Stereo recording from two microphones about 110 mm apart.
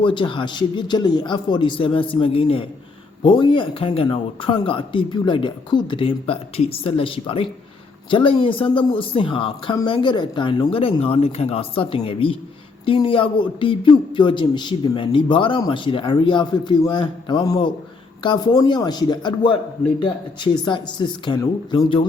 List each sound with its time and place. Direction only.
0.0 s speech: 45° left (ahead or behind)